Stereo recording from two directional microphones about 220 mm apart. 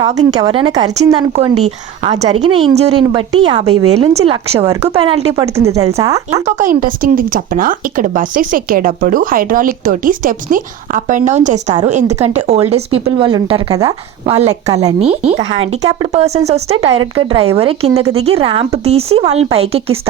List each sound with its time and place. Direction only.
0.3 s a woman's voice: 20° right (ahead or behind)
6.3 s a woman's voice: 30° right (ahead or behind)